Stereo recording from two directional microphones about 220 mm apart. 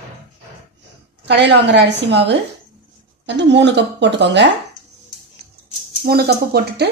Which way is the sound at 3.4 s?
55° right (ahead or behind).